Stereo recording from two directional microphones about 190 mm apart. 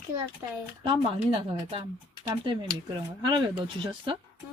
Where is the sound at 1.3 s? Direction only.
30° right (ahead or behind).